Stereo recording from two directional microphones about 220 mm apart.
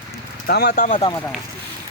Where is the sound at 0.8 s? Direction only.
35° left (ahead or behind).